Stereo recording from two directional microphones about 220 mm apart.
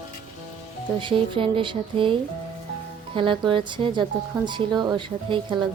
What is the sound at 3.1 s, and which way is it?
Speech, 20° right (ahead or behind).